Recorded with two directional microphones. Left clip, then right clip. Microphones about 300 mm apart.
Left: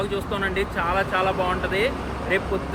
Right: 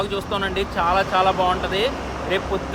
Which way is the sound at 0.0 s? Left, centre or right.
Centre.